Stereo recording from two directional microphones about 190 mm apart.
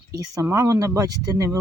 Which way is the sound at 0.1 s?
20° right (ahead or behind).